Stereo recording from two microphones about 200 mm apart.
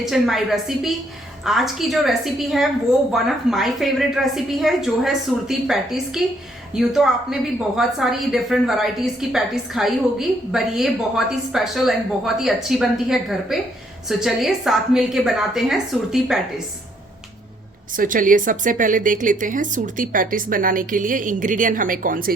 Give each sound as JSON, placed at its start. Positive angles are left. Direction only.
{"t": 0.0, "sound": "a woman's voice", "side_deg": 0}
{"t": 17.9, "sound": "speech", "side_deg": -40}